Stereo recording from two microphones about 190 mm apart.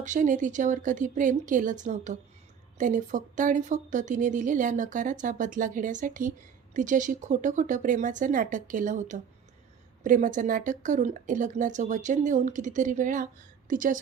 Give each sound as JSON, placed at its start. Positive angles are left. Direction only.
{"t": 0.0, "sound": "speech", "side_deg": -40}